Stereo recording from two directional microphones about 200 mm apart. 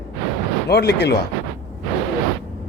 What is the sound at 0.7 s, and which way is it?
Speech, 55° left (ahead or behind).